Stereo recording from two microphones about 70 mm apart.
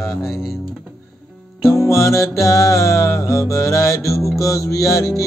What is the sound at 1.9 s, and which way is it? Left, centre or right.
Music, left.